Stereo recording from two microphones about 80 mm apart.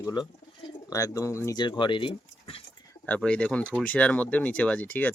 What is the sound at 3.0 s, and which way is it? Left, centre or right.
Speech, centre.